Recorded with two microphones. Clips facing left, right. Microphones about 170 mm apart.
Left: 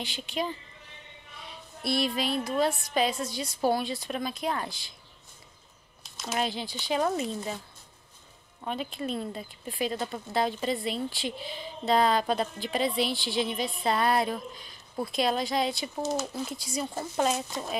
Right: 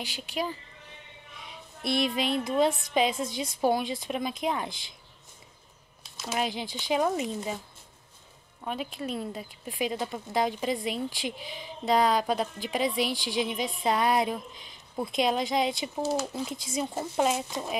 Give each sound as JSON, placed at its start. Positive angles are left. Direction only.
{"t": 0.0, "sound": "speech", "side_deg": -10}
{"t": 1.5, "sound": "music", "side_deg": -20}
{"t": 6.1, "sound": "speech", "side_deg": -10}
{"t": 8.6, "sound": "speech", "side_deg": -10}
{"t": 16.7, "sound": "music", "side_deg": -20}
{"t": 17.2, "sound": "speech", "side_deg": -15}